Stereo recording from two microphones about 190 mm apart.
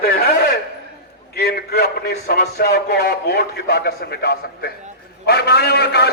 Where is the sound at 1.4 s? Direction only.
55° left (ahead or behind).